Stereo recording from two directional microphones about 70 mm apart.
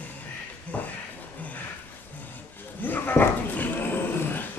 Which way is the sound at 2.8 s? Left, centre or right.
Left.